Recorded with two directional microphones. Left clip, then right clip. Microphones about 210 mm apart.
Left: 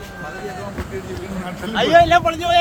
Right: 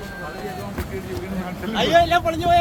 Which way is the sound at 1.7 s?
25° left (ahead or behind).